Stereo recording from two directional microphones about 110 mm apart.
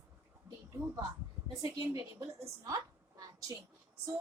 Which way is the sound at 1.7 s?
35° right (ahead or behind).